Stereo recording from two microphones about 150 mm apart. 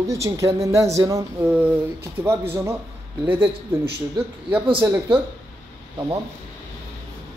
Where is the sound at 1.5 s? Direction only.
10° right (ahead or behind).